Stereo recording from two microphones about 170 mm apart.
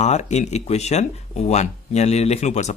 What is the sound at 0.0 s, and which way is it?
Speech, 40° left (ahead or behind).